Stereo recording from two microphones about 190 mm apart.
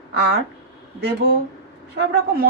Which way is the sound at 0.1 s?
60° right (ahead or behind).